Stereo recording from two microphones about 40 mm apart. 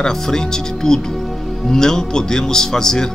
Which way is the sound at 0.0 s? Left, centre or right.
Centre.